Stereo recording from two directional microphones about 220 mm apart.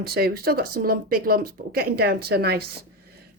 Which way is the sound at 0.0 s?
45° right (ahead or behind).